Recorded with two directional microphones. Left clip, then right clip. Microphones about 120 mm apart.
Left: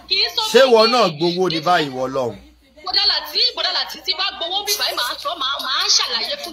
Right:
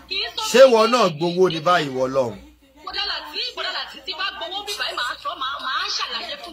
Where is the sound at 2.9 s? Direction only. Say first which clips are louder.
Left 8 dB; 30° left (ahead or behind).